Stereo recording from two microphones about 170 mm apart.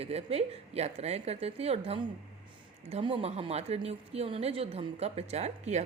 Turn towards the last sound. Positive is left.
turn(degrees=-40)  # may be behind; listen again after turning